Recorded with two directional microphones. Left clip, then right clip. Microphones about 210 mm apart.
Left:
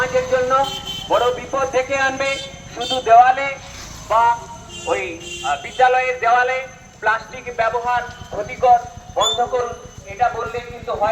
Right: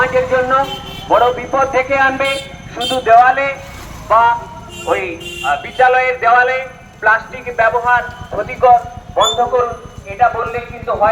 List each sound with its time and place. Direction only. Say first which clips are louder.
0.0 s a sound: right 4 dB; 55° left (ahead or behind)
1.0 s a man's voice: right 6 dB; 30° left (ahead or behind); by 2.3 s 5° left (ahead or behind)
2.7 s a man's voice: right 2 dB; 10° right (ahead or behind)